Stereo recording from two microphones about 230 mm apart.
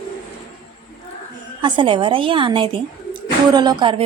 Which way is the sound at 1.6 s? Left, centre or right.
Right.